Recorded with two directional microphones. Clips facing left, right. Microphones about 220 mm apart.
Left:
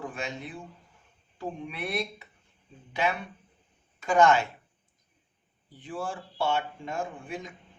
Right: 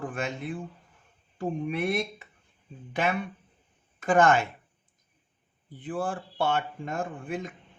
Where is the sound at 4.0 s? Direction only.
50° right (ahead or behind).